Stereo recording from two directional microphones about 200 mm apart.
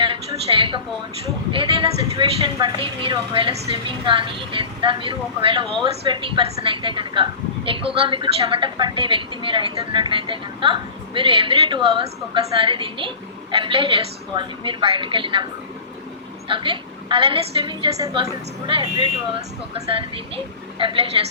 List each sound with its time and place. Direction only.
0.0 s a sound: 25° right (ahead or behind)
1.5 s a woman's voice: 25° right (ahead or behind)
16.5 s a woman's voice: 25° right (ahead or behind)